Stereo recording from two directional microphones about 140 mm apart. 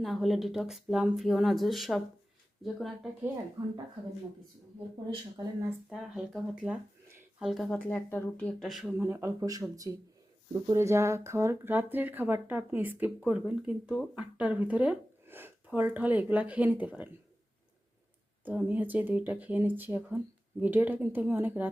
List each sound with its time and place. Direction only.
0.0 s speech: centre (ahead or behind)
3.6 s speech: 25° right (ahead or behind)
5.9 s speech: centre (ahead or behind)
7.9 s speech: 15° left (ahead or behind); by 9.0 s 5° right (ahead or behind)
9.0 s speech: 20° right (ahead or behind)
18.4 s speech: 15° right (ahead or behind)